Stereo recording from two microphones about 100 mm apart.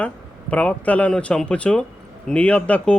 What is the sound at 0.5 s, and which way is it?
Speech, 15° left (ahead or behind).